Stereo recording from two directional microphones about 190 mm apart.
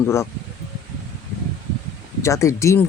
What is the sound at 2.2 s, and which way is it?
Speech, 15° left (ahead or behind).